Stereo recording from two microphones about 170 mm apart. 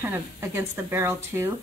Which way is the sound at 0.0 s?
15° right (ahead or behind).